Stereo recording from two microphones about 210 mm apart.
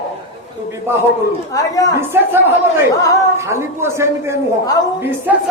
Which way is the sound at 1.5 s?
15° left (ahead or behind).